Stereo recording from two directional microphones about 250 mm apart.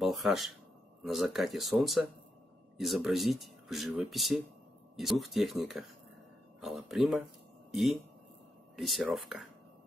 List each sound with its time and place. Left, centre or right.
0.0 s speech: centre